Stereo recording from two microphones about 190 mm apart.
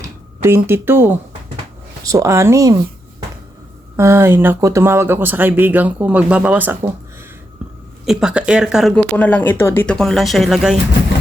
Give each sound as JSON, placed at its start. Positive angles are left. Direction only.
{"t": 0.4, "sound": "speech", "side_deg": -15}
{"t": 3.9, "sound": "speech", "side_deg": -15}
{"t": 7.6, "sound": "a sound", "side_deg": -5}
{"t": 8.0, "sound": "speech", "side_deg": -5}